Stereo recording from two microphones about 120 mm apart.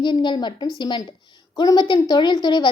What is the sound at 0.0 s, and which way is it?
A woman's voice, 40° left (ahead or behind).